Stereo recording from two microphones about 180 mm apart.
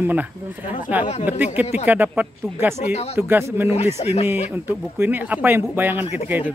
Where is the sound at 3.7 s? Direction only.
35° left (ahead or behind).